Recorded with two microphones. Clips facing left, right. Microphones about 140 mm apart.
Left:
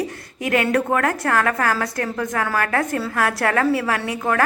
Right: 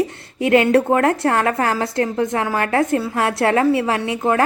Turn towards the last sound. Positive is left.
turn(degrees=-25)  # may be behind; listen again after turning